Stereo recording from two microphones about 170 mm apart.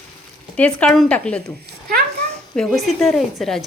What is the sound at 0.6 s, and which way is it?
Speech, 5° left (ahead or behind).